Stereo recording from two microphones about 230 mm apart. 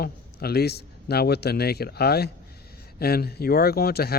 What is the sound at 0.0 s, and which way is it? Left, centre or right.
A man's voice, left.